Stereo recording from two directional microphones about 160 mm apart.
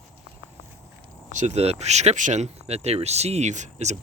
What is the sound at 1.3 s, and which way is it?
Speech, 45° right (ahead or behind).